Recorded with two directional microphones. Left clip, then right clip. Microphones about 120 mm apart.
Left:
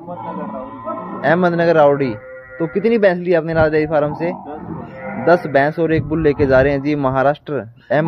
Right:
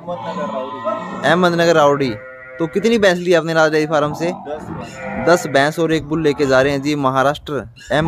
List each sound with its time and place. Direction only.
1.2 s speech: 20° right (ahead or behind)